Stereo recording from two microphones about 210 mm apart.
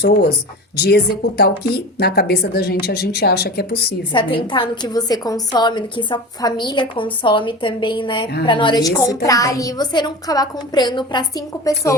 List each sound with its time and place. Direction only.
0.0 s speech: 50° left (ahead or behind)
4.1 s a woman's voice: 25° left (ahead or behind)